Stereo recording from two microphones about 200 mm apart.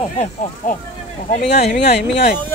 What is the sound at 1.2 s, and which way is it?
Speech, 35° left (ahead or behind).